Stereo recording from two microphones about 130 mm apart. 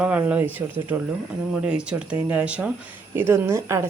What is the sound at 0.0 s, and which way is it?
Speech, 10° right (ahead or behind).